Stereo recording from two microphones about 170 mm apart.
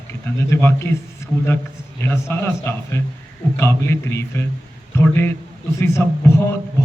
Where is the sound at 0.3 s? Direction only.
15° left (ahead or behind).